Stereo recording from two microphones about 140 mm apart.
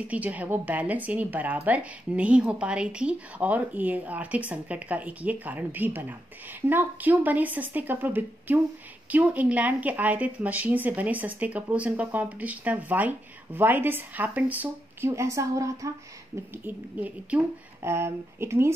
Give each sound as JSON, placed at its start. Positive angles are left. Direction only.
{"t": 0.1, "sound": "a woman's voice", "side_deg": -10}
{"t": 16.6, "sound": "a woman's voice", "side_deg": -10}